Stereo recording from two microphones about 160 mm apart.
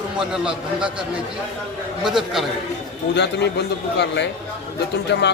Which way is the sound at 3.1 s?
90° left.